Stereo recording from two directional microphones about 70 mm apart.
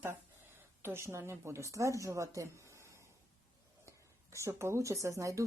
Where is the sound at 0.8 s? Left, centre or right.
Right.